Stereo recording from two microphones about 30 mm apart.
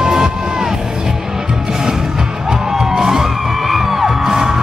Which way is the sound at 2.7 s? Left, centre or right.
Centre.